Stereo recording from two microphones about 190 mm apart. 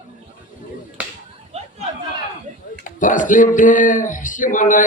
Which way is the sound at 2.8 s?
45° left (ahead or behind).